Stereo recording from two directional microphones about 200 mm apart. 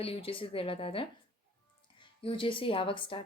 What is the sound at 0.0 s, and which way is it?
Speech, 30° left (ahead or behind).